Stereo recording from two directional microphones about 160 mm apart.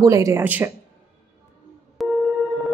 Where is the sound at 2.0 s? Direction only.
Centre (ahead or behind).